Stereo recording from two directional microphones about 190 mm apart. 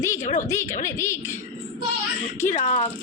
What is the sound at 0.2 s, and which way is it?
Speech, 40° left (ahead or behind).